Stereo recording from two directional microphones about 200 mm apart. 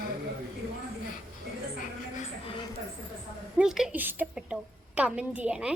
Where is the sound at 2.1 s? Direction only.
30° left (ahead or behind).